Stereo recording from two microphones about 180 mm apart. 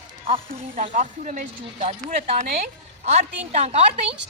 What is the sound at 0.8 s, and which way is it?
A woman's voice, 45° right (ahead or behind).